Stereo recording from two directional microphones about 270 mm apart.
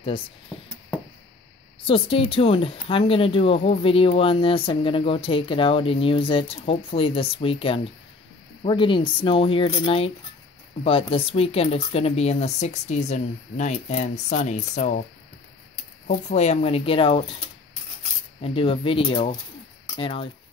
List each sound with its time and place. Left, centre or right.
1.9 s speech: centre
16.1 s speech: left
18.4 s speech: left